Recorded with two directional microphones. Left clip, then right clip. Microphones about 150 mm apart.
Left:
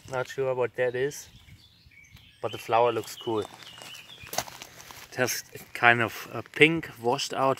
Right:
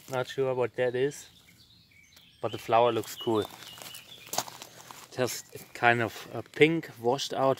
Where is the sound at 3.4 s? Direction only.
50° right (ahead or behind).